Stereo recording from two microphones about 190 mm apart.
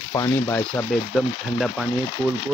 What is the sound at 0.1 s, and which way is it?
Speech, 15° left (ahead or behind).